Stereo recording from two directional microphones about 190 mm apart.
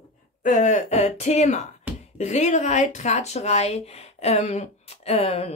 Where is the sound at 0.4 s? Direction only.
40° left (ahead or behind).